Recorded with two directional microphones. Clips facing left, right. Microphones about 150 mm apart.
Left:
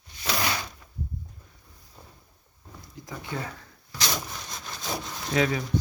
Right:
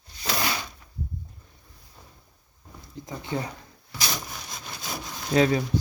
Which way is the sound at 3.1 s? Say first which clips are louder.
Right 4 dB; 20° right (ahead or behind).